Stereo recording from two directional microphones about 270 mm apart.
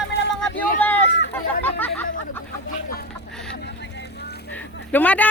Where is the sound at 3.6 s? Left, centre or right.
Left.